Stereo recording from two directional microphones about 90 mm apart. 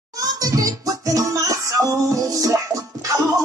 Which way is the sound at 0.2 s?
40° right (ahead or behind).